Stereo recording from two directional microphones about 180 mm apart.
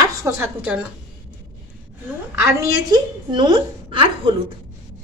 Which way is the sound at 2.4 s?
20° right (ahead or behind).